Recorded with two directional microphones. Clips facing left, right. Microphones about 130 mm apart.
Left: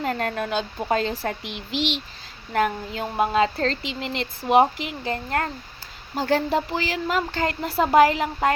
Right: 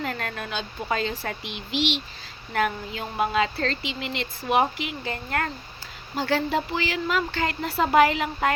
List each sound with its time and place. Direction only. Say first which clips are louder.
0.0 s speech: left 5 dB; 40° left (ahead or behind)